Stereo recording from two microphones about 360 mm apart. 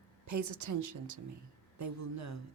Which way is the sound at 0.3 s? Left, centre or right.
Right.